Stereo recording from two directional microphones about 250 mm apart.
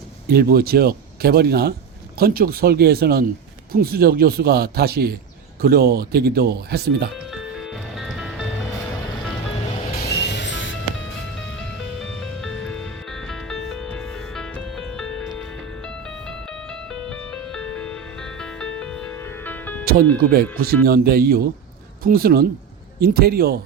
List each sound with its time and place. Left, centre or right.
0.3 s speech: right
7.3 s music: centre
10.0 s music: left
12.2 s music: centre
16.9 s music: centre
19.8 s music: right
20.3 s speech: right